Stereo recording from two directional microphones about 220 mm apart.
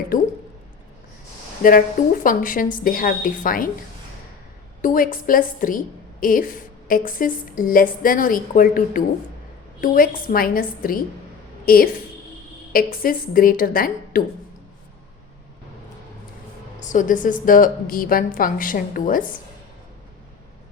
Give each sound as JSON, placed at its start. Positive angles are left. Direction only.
{"t": 0.1, "sound": "a woman's voice", "side_deg": 40}
{"t": 1.6, "sound": "a woman's voice", "side_deg": 40}
{"t": 4.8, "sound": "a woman's voice", "side_deg": 40}
{"t": 16.8, "sound": "a woman's voice", "side_deg": 35}